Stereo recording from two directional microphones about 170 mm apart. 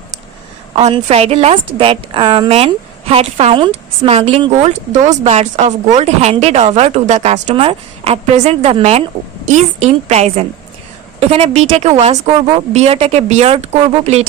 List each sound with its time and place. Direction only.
0.8 s speech: 40° right (ahead or behind)